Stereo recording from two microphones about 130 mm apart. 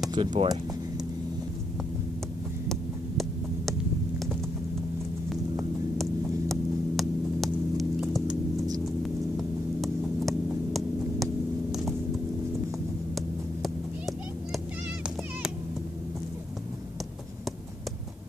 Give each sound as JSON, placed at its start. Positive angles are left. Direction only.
{"t": 0.1, "sound": "speech", "side_deg": -40}
{"t": 2.7, "sound": "throbbing", "side_deg": 0}
{"t": 6.5, "sound": "hum", "side_deg": 0}
{"t": 13.1, "sound": "a sound", "side_deg": 0}